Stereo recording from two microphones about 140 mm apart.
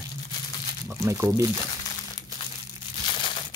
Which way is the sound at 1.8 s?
30° left (ahead or behind).